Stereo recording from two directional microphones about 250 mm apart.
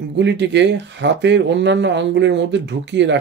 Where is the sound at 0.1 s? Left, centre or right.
Right.